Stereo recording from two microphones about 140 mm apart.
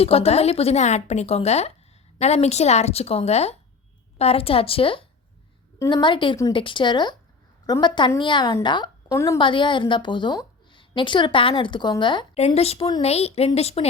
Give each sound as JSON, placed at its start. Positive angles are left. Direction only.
{"t": 0.0, "sound": "a woman's voice", "side_deg": 45}
{"t": 9.0, "sound": "a woman's voice", "side_deg": 20}
{"t": 9.4, "sound": "a woman's voice", "side_deg": 35}
{"t": 12.5, "sound": "speech", "side_deg": 45}